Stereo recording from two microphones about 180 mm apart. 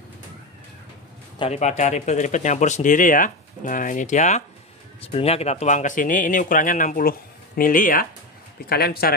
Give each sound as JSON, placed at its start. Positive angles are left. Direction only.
{"t": 1.4, "sound": "a man's voice", "side_deg": 40}